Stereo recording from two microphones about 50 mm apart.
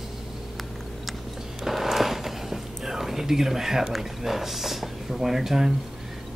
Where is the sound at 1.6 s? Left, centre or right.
Centre.